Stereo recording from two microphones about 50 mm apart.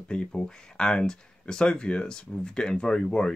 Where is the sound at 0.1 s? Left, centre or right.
Centre.